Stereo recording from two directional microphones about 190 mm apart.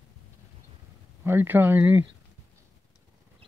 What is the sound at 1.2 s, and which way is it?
Speech, 10° right (ahead or behind).